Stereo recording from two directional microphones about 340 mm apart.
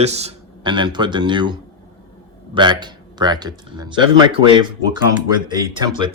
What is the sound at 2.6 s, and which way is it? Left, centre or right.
Speech, centre.